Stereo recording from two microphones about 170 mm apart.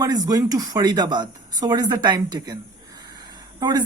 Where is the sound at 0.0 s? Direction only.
20° right (ahead or behind).